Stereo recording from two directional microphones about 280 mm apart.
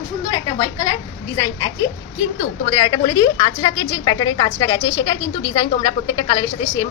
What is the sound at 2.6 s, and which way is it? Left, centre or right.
A woman's voice, centre.